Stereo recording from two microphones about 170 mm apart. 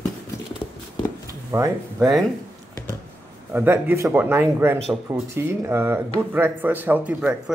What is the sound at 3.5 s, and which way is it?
Speech, 10° right (ahead or behind).